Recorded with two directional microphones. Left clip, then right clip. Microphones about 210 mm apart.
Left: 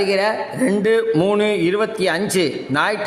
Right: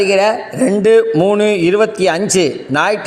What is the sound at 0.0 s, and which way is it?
A man's voice, 20° right (ahead or behind).